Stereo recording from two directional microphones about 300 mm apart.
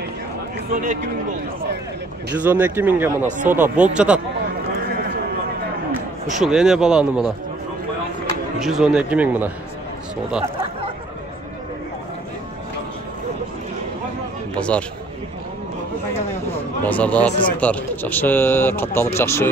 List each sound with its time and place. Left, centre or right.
0.7 s speech: right
2.3 s speech: centre
3.3 s speech: right
3.5 s speech: centre
6.4 s speech: centre
8.5 s speech: centre
14.5 s a man's voice: centre
16.4 s a sound: centre
17.6 s speech: centre